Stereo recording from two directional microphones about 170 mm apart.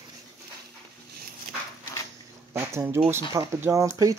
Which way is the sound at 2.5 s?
15° right (ahead or behind).